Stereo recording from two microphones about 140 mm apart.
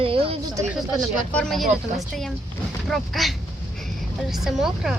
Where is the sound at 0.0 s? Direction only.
40° right (ahead or behind).